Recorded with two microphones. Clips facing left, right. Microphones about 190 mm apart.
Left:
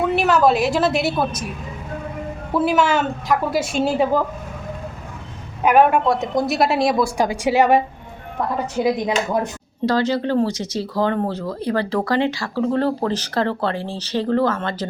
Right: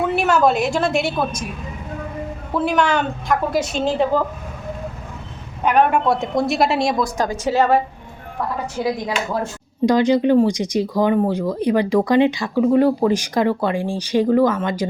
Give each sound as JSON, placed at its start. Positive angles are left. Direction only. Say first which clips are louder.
{"t": 0.2, "sound": "a woman's voice", "louder": "even", "side_deg": 0}
{"t": 2.5, "sound": "a woman's voice", "louder": "left 1 dB", "side_deg": 5}
{"t": 5.6, "sound": "a woman's voice", "louder": "left 1 dB", "side_deg": 5}
{"t": 8.8, "sound": "speech", "louder": "left 3 dB", "side_deg": 20}
{"t": 9.8, "sound": "speech", "louder": "right 4 dB", "side_deg": -15}